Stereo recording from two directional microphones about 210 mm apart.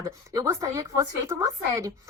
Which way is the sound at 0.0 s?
15° right (ahead or behind).